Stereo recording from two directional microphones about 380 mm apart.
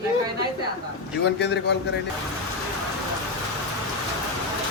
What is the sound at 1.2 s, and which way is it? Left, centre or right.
Speech, left.